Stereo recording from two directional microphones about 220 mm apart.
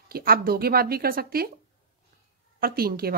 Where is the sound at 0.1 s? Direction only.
40° right (ahead or behind).